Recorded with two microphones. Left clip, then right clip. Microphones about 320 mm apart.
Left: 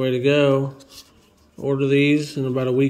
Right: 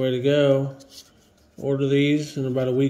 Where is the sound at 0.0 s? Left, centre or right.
Centre.